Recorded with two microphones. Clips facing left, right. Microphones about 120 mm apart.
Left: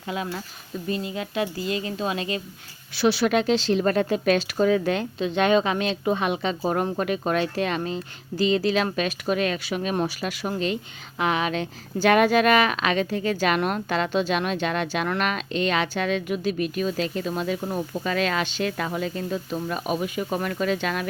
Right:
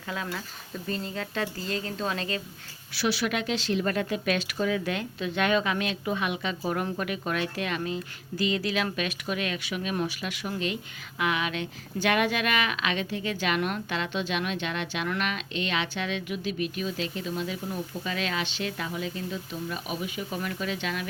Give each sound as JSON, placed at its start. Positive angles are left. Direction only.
{"t": 0.9, "sound": "a woman's voice", "side_deg": 10}
{"t": 2.9, "sound": "a woman's voice", "side_deg": 30}